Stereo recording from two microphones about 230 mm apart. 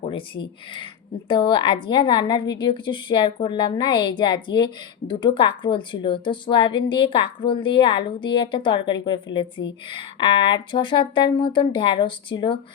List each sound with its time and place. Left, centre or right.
0.0 s a woman's voice: left